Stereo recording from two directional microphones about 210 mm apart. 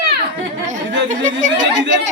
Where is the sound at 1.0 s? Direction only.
35° right (ahead or behind).